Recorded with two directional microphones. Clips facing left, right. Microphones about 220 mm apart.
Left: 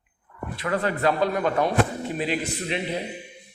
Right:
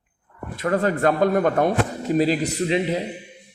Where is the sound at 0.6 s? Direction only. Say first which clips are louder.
Right 4 dB; 45° right (ahead or behind).